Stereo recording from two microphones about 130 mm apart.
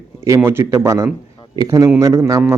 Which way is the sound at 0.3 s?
20° right (ahead or behind).